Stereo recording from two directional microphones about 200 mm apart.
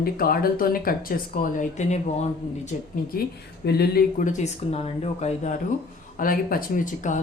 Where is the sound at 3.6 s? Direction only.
55° left (ahead or behind); by 5.5 s 35° left (ahead or behind).